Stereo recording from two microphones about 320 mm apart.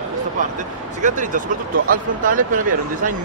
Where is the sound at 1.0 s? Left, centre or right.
Right.